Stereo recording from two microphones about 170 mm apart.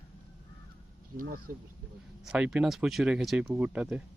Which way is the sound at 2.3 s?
5° right (ahead or behind).